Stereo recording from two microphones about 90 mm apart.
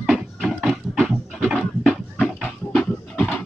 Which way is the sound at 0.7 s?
Centre (ahead or behind).